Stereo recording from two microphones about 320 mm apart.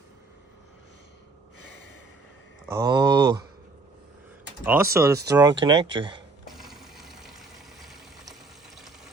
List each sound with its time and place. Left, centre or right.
2.7 s a sound: centre
4.6 s speech: centre
6.5 s water: centre